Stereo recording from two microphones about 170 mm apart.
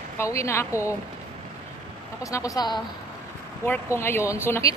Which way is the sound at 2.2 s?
20° left (ahead or behind).